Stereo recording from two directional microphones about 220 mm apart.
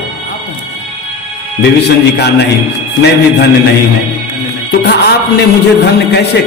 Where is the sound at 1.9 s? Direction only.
50° left (ahead or behind).